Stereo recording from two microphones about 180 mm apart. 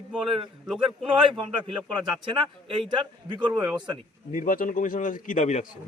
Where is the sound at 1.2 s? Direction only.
25° right (ahead or behind).